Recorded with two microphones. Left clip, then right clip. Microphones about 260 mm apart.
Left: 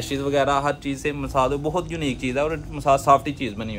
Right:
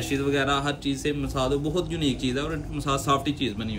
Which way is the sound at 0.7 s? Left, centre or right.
Left.